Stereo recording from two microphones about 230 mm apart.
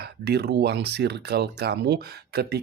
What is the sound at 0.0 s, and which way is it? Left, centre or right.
Speech, right.